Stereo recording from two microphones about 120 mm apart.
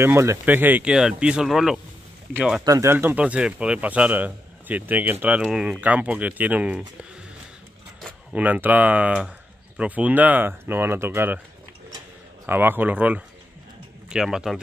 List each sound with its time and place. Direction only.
0.0 s speech: 20° right (ahead or behind)
2.6 s speech: 25° right (ahead or behind); by 6.8 s 10° right (ahead or behind)
8.4 s speech: 15° right (ahead or behind)
12.4 s a man's voice: 15° right (ahead or behind)